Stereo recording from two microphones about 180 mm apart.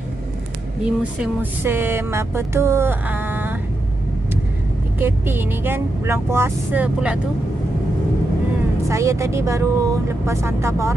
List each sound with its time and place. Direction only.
0.8 s speech: 10° right (ahead or behind)
4.9 s speech: 10° right (ahead or behind)
8.8 s speech: 15° right (ahead or behind)